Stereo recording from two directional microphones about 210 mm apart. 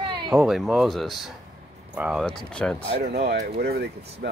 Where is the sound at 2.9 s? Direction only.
50° right (ahead or behind).